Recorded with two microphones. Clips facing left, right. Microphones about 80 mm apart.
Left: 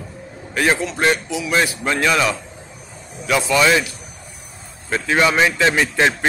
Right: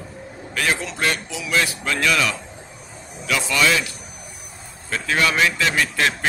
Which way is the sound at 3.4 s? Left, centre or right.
Left.